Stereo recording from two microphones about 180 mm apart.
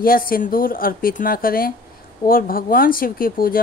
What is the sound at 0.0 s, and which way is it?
Speech, 55° left (ahead or behind).